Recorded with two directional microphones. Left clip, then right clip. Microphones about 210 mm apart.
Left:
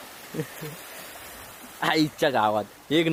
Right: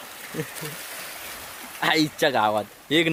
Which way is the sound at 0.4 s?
Centre (ahead or behind).